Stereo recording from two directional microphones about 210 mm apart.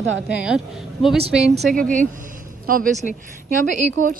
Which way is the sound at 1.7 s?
40° right (ahead or behind).